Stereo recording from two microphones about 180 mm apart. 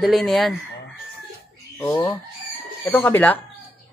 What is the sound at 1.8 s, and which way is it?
Speech, 10° left (ahead or behind).